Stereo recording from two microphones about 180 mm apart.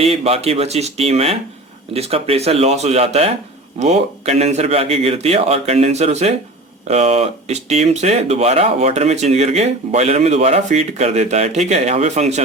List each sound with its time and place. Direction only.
0.0 s speech: 35° right (ahead or behind)